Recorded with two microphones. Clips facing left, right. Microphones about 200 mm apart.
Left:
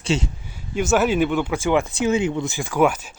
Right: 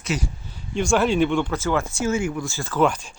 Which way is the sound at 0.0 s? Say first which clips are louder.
Left 4 dB; 30° left (ahead or behind).